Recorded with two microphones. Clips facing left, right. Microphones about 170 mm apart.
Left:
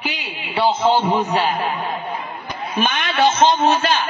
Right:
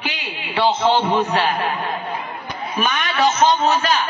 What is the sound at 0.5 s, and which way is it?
Speech, 10° left (ahead or behind).